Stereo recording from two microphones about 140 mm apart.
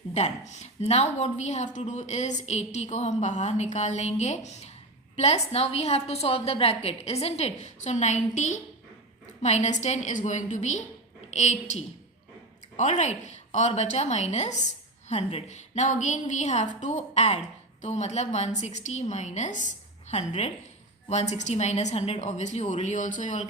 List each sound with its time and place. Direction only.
0.1 s a woman's voice: 55° left (ahead or behind)